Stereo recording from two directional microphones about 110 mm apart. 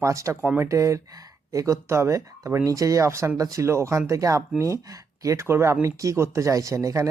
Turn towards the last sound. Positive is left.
turn(degrees=-30)  # may be behind; listen again after turning